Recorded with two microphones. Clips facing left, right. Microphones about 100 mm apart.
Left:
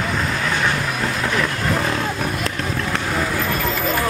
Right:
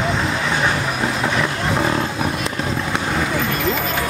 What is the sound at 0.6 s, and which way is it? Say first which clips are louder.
Vehicle: right 1 dB; 15° right (ahead or behind).